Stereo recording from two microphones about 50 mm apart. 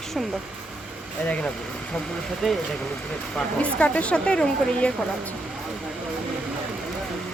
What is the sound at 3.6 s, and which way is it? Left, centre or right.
Speech, left.